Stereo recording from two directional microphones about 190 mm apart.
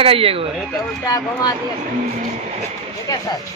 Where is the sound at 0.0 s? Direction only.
30° right (ahead or behind).